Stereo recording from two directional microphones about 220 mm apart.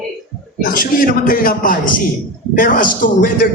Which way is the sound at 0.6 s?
40° left (ahead or behind).